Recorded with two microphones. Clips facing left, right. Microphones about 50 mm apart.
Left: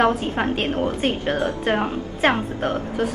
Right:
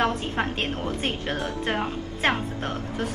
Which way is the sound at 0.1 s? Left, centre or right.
Centre.